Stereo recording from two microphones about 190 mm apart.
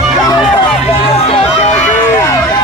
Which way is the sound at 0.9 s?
30° left (ahead or behind).